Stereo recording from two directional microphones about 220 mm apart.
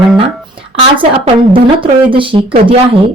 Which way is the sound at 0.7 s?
25° right (ahead or behind).